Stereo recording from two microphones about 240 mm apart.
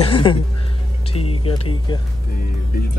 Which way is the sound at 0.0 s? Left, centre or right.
Left.